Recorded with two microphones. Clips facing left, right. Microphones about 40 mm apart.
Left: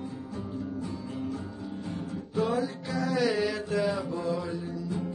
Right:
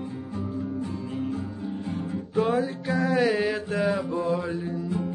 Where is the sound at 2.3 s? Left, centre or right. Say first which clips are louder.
Right 4 dB; right.